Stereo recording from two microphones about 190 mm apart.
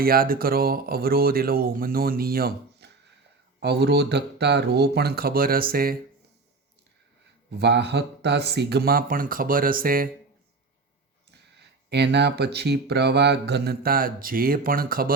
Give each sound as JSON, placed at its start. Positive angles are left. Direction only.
{"t": 0.0, "sound": "speech", "side_deg": -50}
{"t": 7.6, "sound": "speech", "side_deg": -60}
{"t": 11.3, "sound": "speech", "side_deg": -60}